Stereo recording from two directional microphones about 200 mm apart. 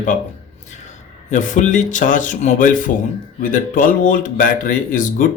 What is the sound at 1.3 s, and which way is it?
Speech, 40° left (ahead or behind).